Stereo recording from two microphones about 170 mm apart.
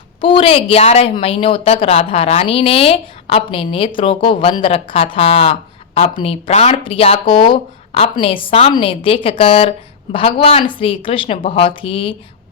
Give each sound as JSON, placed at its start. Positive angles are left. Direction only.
{"t": 0.2, "sound": "a woman's voice", "side_deg": 30}